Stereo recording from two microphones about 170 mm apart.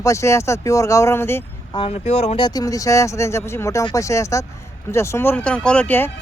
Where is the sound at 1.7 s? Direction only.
35° left (ahead or behind); by 6.1 s 10° left (ahead or behind).